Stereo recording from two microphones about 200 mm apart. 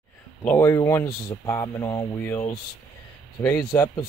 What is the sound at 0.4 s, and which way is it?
Speech, 10° left (ahead or behind).